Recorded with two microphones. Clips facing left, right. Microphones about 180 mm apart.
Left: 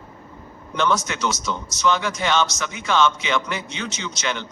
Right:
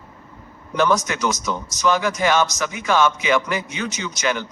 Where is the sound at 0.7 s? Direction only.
15° right (ahead or behind).